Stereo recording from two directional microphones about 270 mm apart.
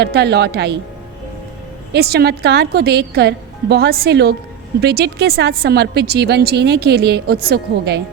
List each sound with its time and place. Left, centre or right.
0.0 s a woman's voice: right
1.9 s a woman's voice: right